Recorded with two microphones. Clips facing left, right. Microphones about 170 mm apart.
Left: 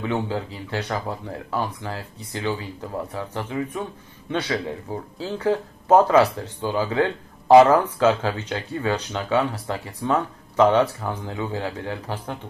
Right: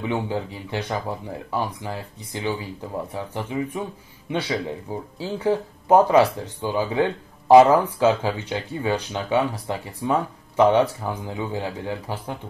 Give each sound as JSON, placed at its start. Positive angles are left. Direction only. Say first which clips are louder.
{"t": 0.0, "sound": "speech", "louder": "even", "side_deg": -15}